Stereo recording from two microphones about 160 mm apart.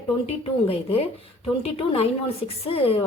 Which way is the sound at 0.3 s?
35° left (ahead or behind).